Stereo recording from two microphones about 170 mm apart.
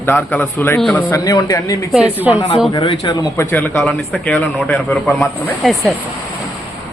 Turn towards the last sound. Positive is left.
turn(degrees=0)  # may be behind; listen again after turning